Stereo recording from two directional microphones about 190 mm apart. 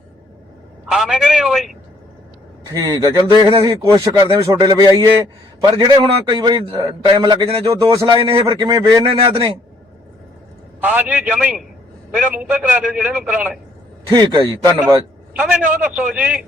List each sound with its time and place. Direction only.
0.9 s a man's voice: centre (ahead or behind)
2.6 s a man's voice: 20° right (ahead or behind)
10.8 s a man's voice: 10° right (ahead or behind)
14.1 s a man's voice: 25° right (ahead or behind)
15.4 s a man's voice: 10° right (ahead or behind)